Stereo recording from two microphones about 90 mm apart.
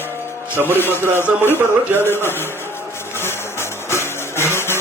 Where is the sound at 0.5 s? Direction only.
25° right (ahead or behind).